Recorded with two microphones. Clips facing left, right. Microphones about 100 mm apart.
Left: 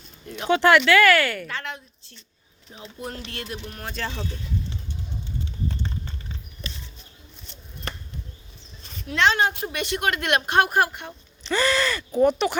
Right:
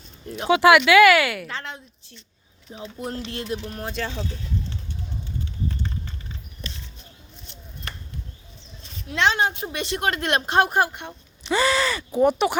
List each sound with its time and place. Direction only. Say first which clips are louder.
0.4 s speech: right 2 dB; 10° right (ahead or behind)
1.5 s a sound: left 1 dB; 25° right (ahead or behind)
2.7 s a woman's voice: right 4 dB; 20° right (ahead or behind)
3.8 s speech: right 1 dB; 10° right (ahead or behind)
9.1 s a woman's voice: left 1 dB; 20° right (ahead or behind)
11.5 s speech: right 1 dB; 5° right (ahead or behind)